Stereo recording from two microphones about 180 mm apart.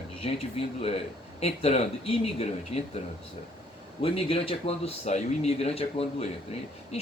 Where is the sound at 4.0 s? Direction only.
30° left (ahead or behind).